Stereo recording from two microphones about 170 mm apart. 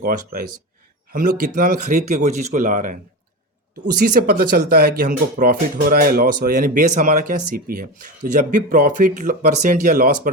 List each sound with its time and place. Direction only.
0.0 s speech: 55° right (ahead or behind)
4.0 s speech: 55° right (ahead or behind)